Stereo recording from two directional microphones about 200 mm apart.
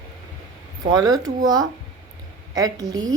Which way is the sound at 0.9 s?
20° right (ahead or behind).